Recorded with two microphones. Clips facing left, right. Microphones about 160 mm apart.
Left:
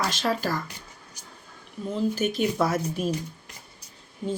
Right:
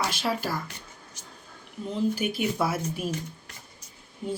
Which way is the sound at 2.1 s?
10° right (ahead or behind).